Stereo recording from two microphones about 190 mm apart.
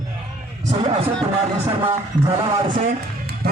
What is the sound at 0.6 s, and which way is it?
Speech, 35° right (ahead or behind).